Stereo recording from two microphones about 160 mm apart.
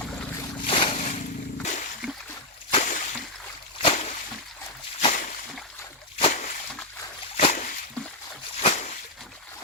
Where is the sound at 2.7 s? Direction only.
50° left (ahead or behind).